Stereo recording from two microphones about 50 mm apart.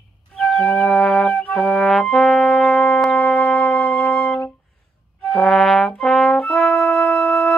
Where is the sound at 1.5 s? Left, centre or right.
Centre.